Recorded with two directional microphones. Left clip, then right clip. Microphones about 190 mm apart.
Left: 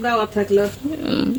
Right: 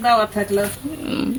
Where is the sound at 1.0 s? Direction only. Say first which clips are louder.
Left 2 dB; 20° left (ahead or behind).